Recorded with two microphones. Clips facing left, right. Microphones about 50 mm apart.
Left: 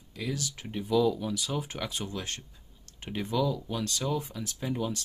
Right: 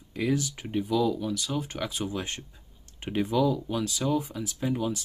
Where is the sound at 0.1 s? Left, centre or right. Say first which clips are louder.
Right 7 dB; right.